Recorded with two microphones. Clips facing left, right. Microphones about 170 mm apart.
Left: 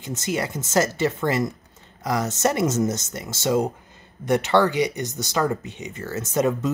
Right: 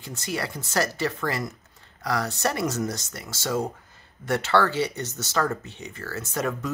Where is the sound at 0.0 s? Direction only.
20° left (ahead or behind).